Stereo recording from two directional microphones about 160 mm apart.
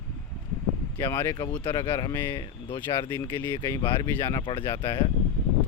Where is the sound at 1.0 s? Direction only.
15° left (ahead or behind).